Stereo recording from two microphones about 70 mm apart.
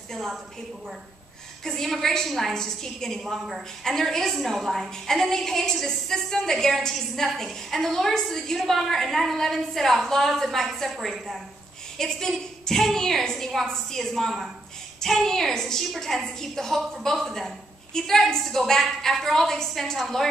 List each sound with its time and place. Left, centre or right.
0.1 s a woman's voice: centre
1.6 s a woman's voice: centre